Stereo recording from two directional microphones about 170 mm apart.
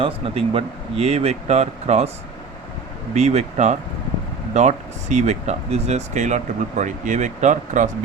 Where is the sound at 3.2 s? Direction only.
40° right (ahead or behind).